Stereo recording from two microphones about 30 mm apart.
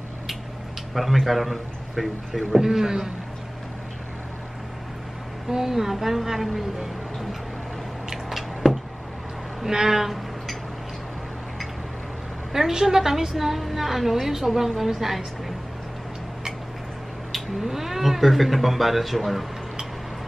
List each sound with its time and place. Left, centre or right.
1.2 s a man's voice: centre
2.6 s a woman's voice: centre
5.5 s a woman's voice: centre
8.3 s a sound: centre
9.7 s a woman's voice: centre
12.7 s a woman's voice: centre
17.3 s cat: centre
18.2 s a man's voice: centre